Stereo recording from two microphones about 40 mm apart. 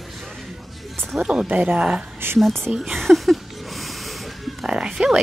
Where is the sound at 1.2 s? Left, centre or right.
Centre.